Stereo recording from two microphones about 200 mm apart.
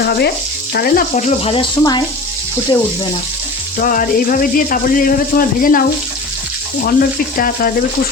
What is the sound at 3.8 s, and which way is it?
Speech, 40° left (ahead or behind).